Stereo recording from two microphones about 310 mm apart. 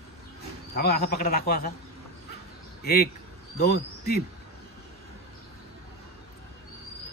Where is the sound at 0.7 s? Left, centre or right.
Left.